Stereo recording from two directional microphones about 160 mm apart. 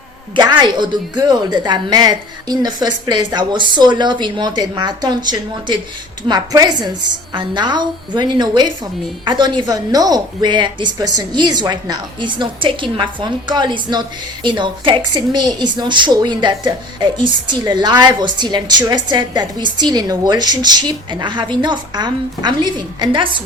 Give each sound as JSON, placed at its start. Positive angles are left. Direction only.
{"t": 0.3, "sound": "a woman's voice", "side_deg": -25}